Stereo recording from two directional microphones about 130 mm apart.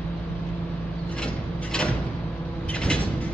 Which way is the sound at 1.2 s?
5° left (ahead or behind).